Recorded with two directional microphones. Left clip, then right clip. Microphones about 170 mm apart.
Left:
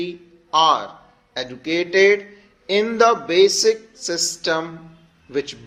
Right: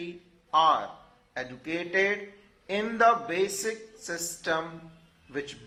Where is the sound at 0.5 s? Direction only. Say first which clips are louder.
Left 7 dB; 35° left (ahead or behind).